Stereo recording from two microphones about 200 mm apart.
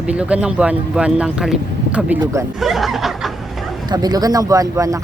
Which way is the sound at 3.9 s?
20° right (ahead or behind).